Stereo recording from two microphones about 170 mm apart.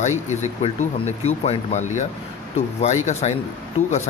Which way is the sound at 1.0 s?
40° left (ahead or behind).